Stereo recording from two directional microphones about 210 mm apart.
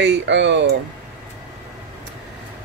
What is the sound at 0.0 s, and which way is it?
Speech, 55° right (ahead or behind).